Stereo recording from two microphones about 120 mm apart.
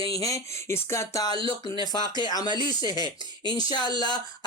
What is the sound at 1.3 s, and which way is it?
Speech, 45° right (ahead or behind).